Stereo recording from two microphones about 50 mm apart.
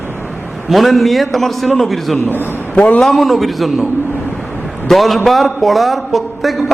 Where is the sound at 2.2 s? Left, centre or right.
Left.